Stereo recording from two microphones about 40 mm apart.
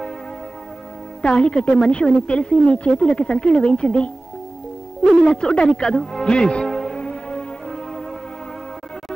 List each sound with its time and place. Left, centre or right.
1.2 s a woman's voice: left
5.2 s a woman's voice: left
5.9 s music: centre